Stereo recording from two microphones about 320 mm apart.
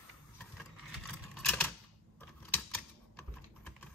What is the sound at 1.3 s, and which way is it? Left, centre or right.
Typewriter, centre.